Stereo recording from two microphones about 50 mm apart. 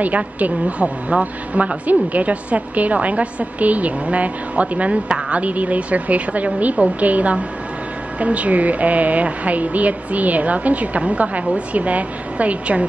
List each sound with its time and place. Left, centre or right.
0.0 s a woman's voice: right